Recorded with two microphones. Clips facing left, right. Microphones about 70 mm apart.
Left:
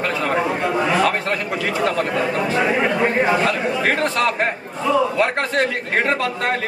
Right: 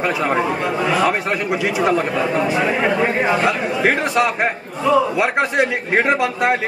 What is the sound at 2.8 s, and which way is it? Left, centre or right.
A man's voice, centre.